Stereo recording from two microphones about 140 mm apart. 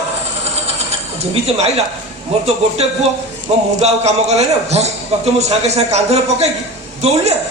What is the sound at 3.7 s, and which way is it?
A man's voice, 50° right (ahead or behind).